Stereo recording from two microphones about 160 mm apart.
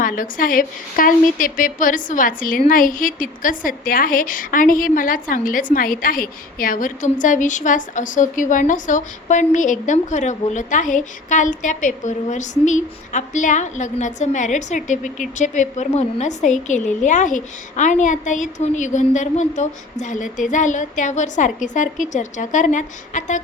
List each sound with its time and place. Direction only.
0.0 s a woman's voice: 60° left (ahead or behind)